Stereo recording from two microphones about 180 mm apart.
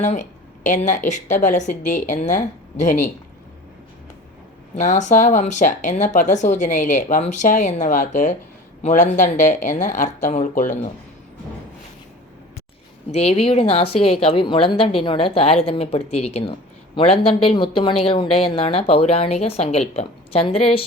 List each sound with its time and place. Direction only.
0.0 s speech: 40° left (ahead or behind)
4.8 s speech: 40° left (ahead or behind)
13.1 s a woman's voice: 35° left (ahead or behind)